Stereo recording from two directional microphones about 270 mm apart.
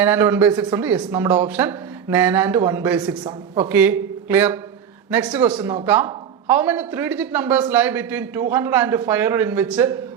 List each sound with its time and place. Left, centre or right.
0.0 s speech: centre
3.8 s a man's voice: centre
5.5 s speech: centre
5.8 s speech: centre